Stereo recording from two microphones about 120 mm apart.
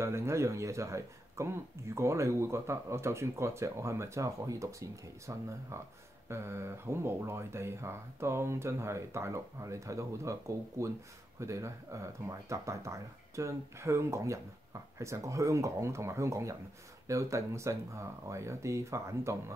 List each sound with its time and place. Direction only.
0.0 s speech: 20° right (ahead or behind)